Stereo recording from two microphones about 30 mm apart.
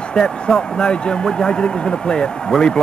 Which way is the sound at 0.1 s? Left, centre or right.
Left.